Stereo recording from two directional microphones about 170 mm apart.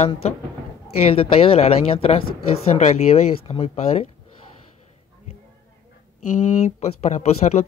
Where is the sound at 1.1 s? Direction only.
35° left (ahead or behind).